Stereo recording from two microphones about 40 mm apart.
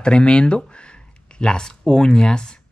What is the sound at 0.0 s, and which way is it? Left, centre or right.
Speech, left.